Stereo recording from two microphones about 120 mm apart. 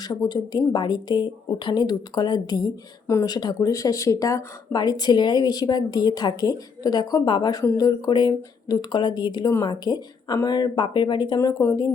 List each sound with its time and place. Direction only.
0.0 s speech: 35° left (ahead or behind)
11.3 s speech: 25° left (ahead or behind)